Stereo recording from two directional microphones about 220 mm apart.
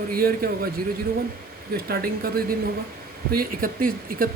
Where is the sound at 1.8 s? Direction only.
45° right (ahead or behind).